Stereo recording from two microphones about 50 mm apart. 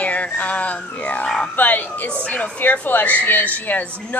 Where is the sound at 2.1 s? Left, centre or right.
Left.